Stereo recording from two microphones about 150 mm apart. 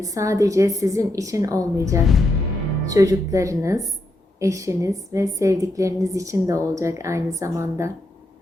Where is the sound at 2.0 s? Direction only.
Centre (ahead or behind).